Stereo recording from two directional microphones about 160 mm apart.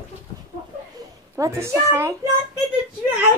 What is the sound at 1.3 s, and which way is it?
Speech, 20° right (ahead or behind).